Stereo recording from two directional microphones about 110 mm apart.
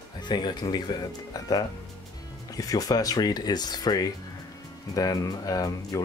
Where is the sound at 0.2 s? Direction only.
45° left (ahead or behind).